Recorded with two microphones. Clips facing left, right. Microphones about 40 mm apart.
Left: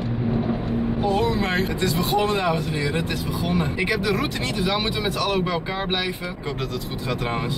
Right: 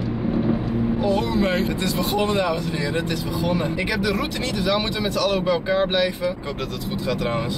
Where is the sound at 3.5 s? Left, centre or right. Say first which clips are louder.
Even; centre.